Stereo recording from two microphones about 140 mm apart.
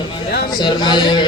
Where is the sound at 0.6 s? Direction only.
30° left (ahead or behind).